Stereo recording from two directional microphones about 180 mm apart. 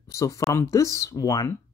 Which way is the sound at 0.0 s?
15° left (ahead or behind).